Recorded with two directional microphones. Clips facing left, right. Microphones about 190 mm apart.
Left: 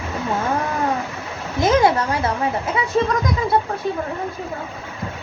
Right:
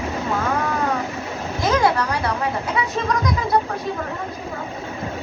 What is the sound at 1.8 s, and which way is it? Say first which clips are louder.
Speech: left 2 dB; 25° left (ahead or behind).